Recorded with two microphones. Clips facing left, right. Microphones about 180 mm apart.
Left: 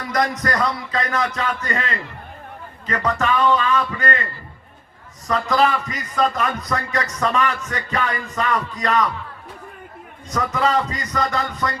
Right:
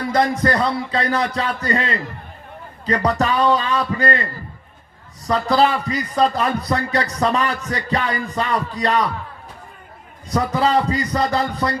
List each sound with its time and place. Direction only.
0.0 s a man's voice: 30° right (ahead or behind)
10.2 s a man's voice: 35° right (ahead or behind)